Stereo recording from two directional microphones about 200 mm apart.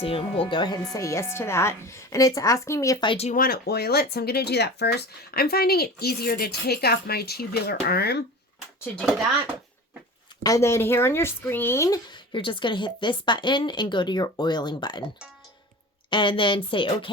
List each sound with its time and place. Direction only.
0.0 s a woman's voice: 30° left (ahead or behind)
3.3 s speech: 50° left (ahead or behind)
8.8 s speech: 5° left (ahead or behind)
10.4 s speech: 15° left (ahead or behind)
16.0 s speech: 25° left (ahead or behind)